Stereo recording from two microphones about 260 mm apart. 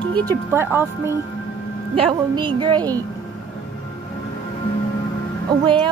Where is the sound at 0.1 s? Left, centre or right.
Centre.